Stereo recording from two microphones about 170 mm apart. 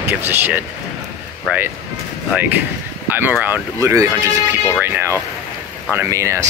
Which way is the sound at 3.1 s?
10° right (ahead or behind).